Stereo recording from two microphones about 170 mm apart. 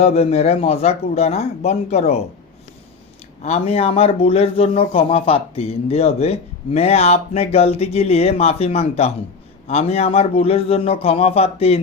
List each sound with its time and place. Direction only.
0.0 s a man's voice: 40° left (ahead or behind)
3.4 s a man's voice: 40° left (ahead or behind)